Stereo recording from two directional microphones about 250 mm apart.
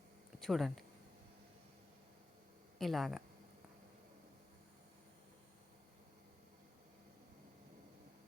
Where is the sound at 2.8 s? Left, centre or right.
Centre.